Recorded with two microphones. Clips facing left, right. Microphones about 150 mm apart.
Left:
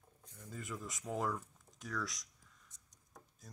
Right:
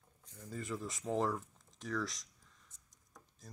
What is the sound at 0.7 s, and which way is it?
Speech, 15° right (ahead or behind).